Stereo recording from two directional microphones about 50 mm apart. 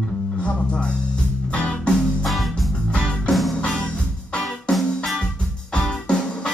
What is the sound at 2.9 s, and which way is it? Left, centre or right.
Music, centre.